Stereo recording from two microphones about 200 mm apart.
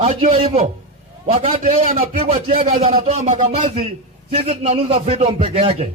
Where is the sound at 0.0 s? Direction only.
30° right (ahead or behind).